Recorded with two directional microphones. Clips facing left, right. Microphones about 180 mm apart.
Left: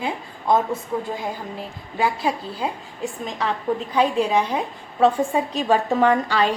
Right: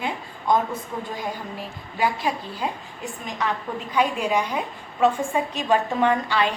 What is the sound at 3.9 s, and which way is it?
A woman's voice, 30° left (ahead or behind).